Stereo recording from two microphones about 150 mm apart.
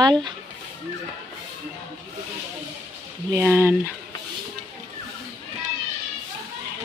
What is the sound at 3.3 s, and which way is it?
Speech, 15° right (ahead or behind).